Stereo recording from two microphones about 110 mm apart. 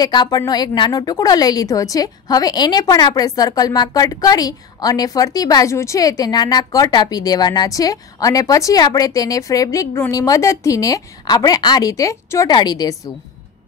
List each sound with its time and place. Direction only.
0.0 s a woman's voice: 40° left (ahead or behind)
12.4 s a woman's voice: 40° left (ahead or behind)